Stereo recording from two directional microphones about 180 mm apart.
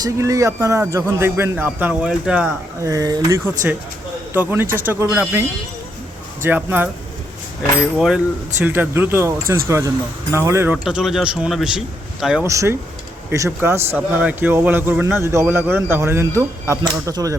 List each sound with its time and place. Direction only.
0.0 s a man's voice: 15° right (ahead or behind)
2.8 s a man's voice: 20° right (ahead or behind)
7.9 s a man's voice: 5° right (ahead or behind)
10.8 s a man's voice: centre (ahead or behind)
12.5 s a man's voice: 15° right (ahead or behind)